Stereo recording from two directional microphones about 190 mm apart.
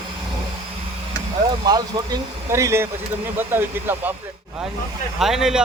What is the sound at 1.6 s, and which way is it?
Speech, 20° right (ahead or behind).